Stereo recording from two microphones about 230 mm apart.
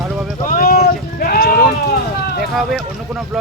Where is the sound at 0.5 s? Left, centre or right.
Left.